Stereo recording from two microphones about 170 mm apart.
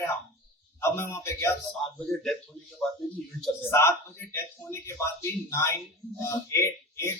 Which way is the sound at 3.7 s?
15° left (ahead or behind).